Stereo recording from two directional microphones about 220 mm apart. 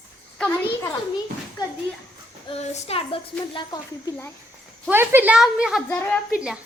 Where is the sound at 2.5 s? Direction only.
30° left (ahead or behind).